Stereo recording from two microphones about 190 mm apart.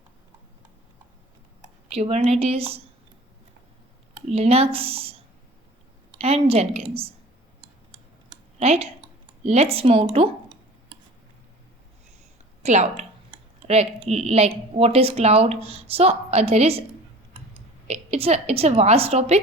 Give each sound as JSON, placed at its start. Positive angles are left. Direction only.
{"t": 1.9, "sound": "speech", "side_deg": -35}
{"t": 4.3, "sound": "speech", "side_deg": -30}
{"t": 6.1, "sound": "speech", "side_deg": -30}
{"t": 8.5, "sound": "speech", "side_deg": -35}
{"t": 12.6, "sound": "a woman's voice", "side_deg": -35}
{"t": 17.8, "sound": "speech", "side_deg": -35}